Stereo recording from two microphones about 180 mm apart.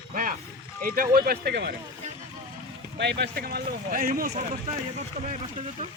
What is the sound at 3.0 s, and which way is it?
Speech, 65° right (ahead or behind).